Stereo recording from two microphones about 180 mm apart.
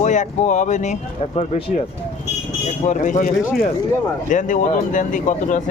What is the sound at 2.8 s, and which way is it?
Speech, 45° left (ahead or behind).